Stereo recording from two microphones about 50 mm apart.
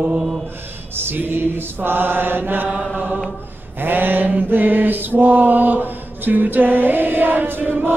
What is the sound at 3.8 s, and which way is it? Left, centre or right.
Mantra, right.